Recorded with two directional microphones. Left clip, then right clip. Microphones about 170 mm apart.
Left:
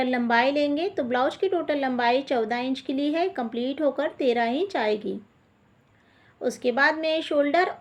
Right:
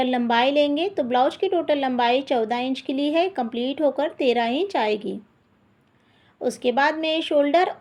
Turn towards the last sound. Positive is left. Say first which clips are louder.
# right 3 dB
turn(degrees=-30)  # may be behind; listen again after turning